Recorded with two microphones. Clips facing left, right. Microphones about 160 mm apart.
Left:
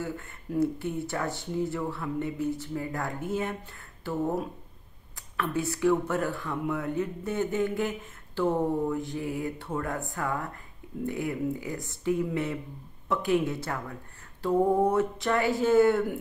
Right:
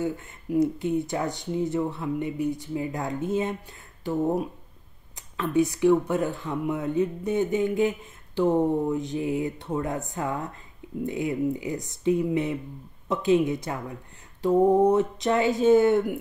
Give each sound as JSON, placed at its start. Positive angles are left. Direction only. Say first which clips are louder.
{"t": 0.0, "sound": "speech", "louder": "right 6 dB", "side_deg": -15}